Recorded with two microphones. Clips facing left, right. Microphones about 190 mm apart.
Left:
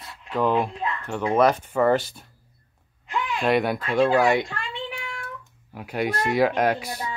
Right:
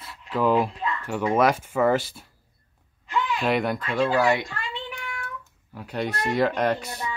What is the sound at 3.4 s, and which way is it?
Speech, centre (ahead or behind).